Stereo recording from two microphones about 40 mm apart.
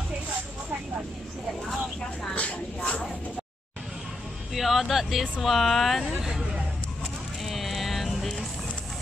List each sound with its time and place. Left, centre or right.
2.3 s a sound: left
4.6 s speech: centre
6.0 s speech: centre
7.4 s music: centre